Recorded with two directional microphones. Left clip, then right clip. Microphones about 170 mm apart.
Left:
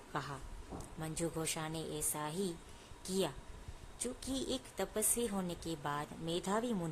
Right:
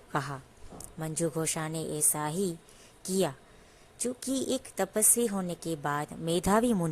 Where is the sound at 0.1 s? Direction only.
35° right (ahead or behind).